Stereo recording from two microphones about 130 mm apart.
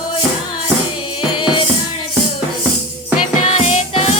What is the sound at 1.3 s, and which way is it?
Music, 40° left (ahead or behind).